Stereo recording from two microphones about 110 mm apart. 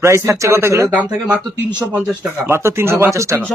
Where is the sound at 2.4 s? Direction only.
20° right (ahead or behind).